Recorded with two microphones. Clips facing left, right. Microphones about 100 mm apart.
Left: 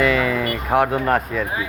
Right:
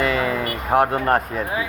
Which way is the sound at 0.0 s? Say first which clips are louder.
Left 2 dB; 35° right (ahead or behind).